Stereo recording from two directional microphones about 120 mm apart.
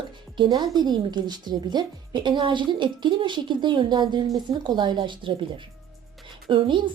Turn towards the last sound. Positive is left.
turn(degrees=-40)  # may be behind; listen again after turning